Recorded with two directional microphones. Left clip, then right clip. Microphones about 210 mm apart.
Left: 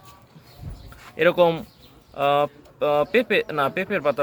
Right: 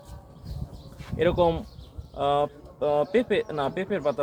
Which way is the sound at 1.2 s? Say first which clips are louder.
Left 5 dB; 15° left (ahead or behind).